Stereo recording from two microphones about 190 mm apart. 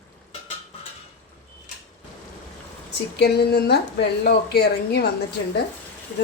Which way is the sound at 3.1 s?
60° left (ahead or behind).